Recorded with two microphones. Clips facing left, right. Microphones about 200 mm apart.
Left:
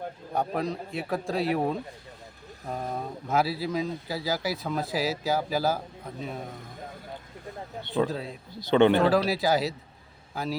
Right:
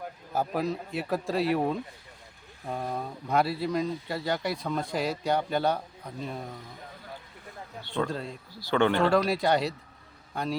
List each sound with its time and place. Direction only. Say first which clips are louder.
0.3 s speech: even; centre (ahead or behind)
7.9 s speech: left 3 dB; 5° left (ahead or behind)
8.5 s speech: left 5 dB; 20° left (ahead or behind)
9.0 s speech: left 1 dB; centre (ahead or behind)